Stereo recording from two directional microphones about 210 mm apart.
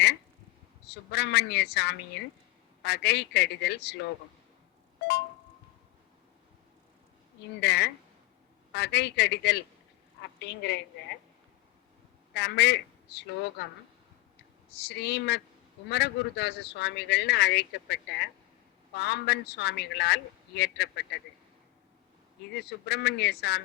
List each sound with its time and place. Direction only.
0.9 s a man's voice: 55° left (ahead or behind)
7.6 s a woman's voice: 55° left (ahead or behind)
12.3 s a man's voice: 55° left (ahead or behind)
14.8 s a man's voice: 55° left (ahead or behind)
22.5 s a man's voice: 55° left (ahead or behind)